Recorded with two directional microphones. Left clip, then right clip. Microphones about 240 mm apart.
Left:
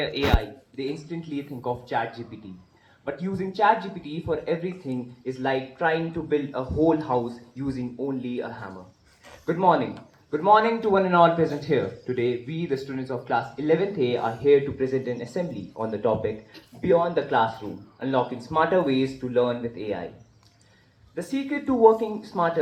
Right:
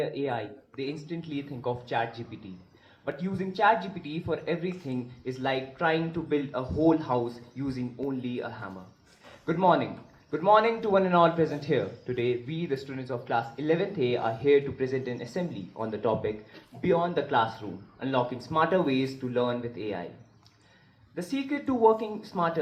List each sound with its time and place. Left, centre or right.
0.0 s speech: right
21.2 s speech: right